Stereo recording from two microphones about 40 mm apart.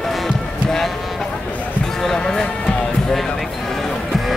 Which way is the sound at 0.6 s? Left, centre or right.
Centre.